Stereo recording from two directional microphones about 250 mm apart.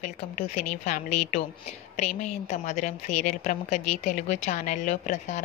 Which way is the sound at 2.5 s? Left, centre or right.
Left.